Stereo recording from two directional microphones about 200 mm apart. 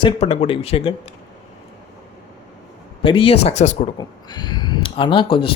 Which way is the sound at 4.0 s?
20° left (ahead or behind).